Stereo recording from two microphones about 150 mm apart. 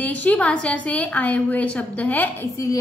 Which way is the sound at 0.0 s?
10° left (ahead or behind).